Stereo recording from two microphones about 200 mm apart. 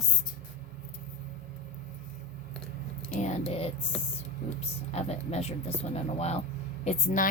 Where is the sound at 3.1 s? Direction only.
35° left (ahead or behind).